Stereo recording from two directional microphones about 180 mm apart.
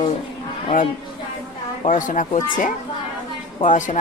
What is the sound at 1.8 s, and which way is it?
Speech, 45° left (ahead or behind).